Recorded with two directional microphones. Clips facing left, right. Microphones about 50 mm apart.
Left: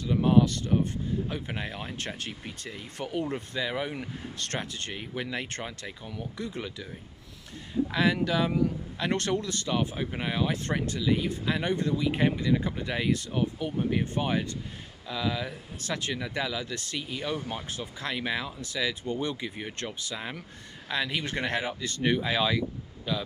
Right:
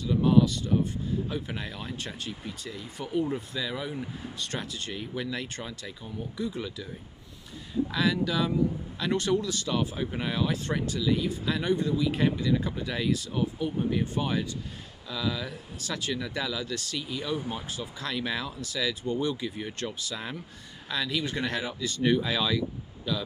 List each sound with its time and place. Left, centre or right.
0.0 s speech: left
3.0 s speech: left
3.9 s speech: left
4.6 s speech: left
4.9 s speech: left
5.5 s speech: left
6.3 s speech: left
7.9 s speech: left
9.7 s speech: left
10.5 s speech: left
11.7 s speech: left
12.1 s speech: left
20.9 s speech: left